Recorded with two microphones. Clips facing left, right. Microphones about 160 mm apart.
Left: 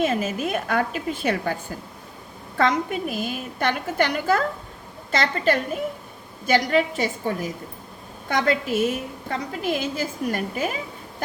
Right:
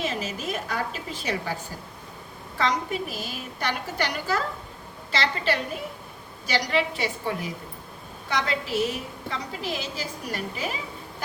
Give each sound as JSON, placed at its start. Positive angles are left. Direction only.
{"t": 0.0, "sound": "a woman's voice", "side_deg": 50}
{"t": 2.6, "sound": "a woman's voice", "side_deg": 50}